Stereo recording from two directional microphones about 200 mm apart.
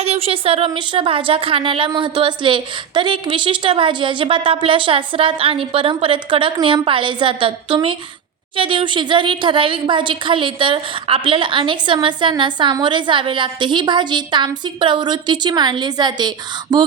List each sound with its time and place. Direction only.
0.0 s a woman's voice: 30° right (ahead or behind)